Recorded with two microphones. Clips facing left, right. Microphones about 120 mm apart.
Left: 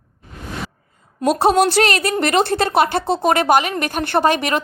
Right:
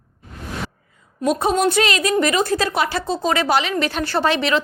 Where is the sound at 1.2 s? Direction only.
75° left (ahead or behind).